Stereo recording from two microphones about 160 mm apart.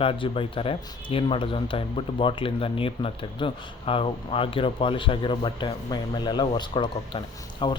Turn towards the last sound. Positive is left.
turn(degrees=30)  # may be behind; listen again after turning